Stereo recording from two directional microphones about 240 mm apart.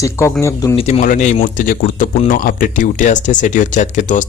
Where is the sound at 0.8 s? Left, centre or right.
Left.